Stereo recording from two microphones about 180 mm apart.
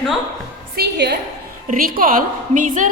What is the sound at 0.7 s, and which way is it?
Speech, 65° right (ahead or behind).